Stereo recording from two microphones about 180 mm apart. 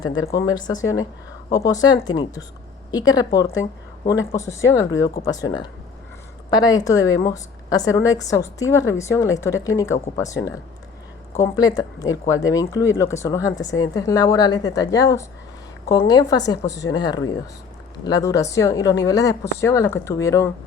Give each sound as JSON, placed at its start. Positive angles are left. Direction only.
{"t": 0.0, "sound": "speech", "side_deg": 90}
{"t": 0.3, "sound": "a woman's voice", "side_deg": 20}